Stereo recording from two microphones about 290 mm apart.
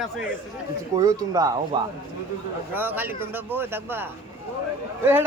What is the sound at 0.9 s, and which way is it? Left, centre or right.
Speech, centre.